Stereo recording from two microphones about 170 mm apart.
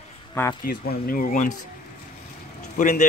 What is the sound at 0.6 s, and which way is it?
Speech, 60° left (ahead or behind).